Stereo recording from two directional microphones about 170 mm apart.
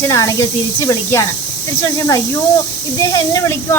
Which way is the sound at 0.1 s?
20° left (ahead or behind).